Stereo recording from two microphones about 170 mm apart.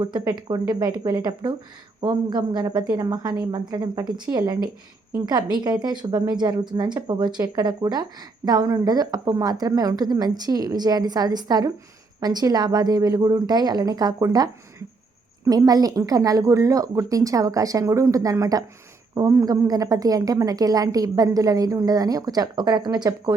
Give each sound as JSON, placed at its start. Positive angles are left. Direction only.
{"t": 0.0, "sound": "a woman's voice", "side_deg": -25}